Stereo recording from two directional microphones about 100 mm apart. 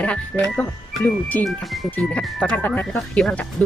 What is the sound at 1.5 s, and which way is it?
Speech, centre (ahead or behind).